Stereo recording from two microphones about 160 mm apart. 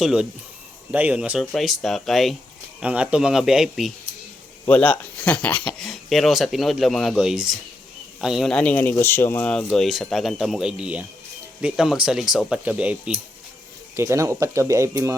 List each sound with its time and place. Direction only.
0.0 s speech: 5° right (ahead or behind)
4.6 s speech: 10° left (ahead or behind); by 15.1 s 20° right (ahead or behind)